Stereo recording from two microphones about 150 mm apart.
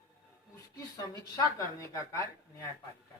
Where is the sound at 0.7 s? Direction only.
25° left (ahead or behind).